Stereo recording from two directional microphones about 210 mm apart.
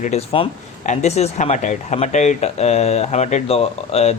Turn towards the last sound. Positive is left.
turn(degrees=30)  # may be behind; listen again after turning